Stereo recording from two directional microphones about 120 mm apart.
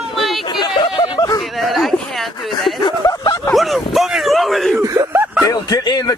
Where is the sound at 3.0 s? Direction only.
25° left (ahead or behind).